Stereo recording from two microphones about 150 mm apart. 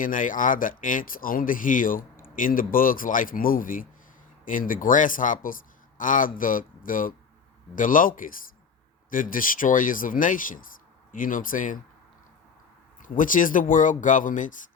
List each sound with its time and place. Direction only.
0.0 s a man's voice: 65° left (ahead or behind)
13.0 s a man's voice: 60° left (ahead or behind)